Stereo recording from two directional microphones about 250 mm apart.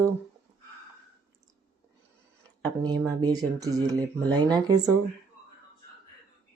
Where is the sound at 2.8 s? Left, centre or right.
Centre.